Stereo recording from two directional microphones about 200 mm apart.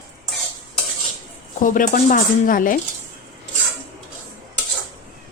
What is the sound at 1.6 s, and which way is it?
Speech, 40° left (ahead or behind).